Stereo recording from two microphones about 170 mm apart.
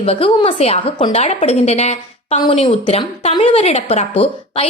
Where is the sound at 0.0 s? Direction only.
35° left (ahead or behind).